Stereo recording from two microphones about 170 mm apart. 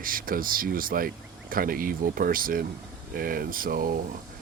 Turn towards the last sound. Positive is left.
turn(degrees=-55)  # may be behind; listen again after turning